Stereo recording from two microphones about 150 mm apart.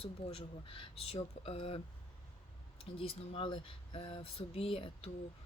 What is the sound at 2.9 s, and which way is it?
Speech, 35° left (ahead or behind).